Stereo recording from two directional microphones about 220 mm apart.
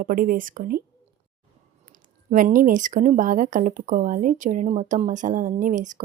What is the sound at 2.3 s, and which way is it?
Speech, 40° right (ahead or behind).